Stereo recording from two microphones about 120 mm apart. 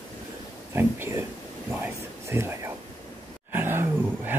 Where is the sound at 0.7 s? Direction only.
20° right (ahead or behind).